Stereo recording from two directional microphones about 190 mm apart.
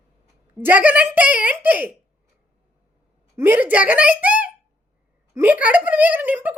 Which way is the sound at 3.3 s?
10° right (ahead or behind).